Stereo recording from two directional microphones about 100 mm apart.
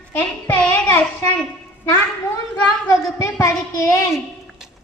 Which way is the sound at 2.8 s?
35° left (ahead or behind).